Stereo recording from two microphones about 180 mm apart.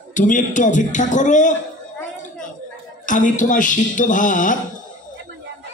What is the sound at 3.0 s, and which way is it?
Speech, 45° left (ahead or behind).